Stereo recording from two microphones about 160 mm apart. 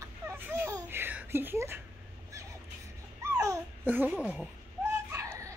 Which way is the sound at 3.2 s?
20° right (ahead or behind).